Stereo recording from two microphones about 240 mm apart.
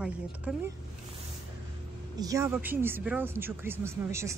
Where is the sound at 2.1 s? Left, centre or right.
Centre.